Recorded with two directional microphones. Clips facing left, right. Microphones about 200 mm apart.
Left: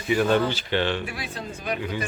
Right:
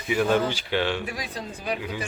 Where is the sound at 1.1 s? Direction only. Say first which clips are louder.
Right 1 dB; 35° right (ahead or behind).